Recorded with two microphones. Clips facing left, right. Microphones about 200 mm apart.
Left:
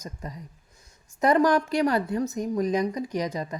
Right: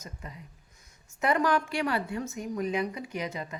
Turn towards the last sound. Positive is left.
turn(degrees=40)  # may be behind; listen again after turning